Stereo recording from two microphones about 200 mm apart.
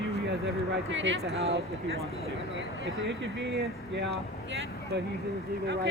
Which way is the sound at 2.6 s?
65° right (ahead or behind).